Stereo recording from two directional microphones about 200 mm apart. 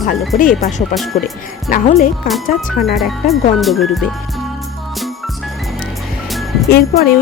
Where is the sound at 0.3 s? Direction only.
45° left (ahead or behind).